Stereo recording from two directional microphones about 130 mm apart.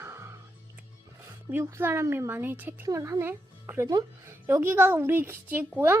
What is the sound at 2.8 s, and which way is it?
Speech, 25° right (ahead or behind).